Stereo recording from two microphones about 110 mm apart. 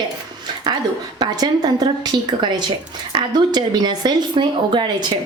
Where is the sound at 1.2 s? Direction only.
40° right (ahead or behind).